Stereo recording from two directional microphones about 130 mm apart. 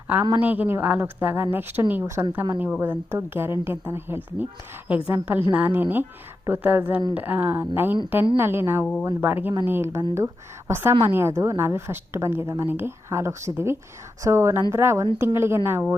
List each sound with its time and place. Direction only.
0.3 s a woman's voice: 15° right (ahead or behind)